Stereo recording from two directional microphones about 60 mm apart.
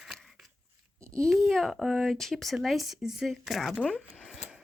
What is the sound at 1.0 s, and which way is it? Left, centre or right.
Babbling, right.